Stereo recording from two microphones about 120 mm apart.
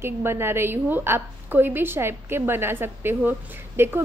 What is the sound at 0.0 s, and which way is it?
A woman's voice, 20° right (ahead or behind).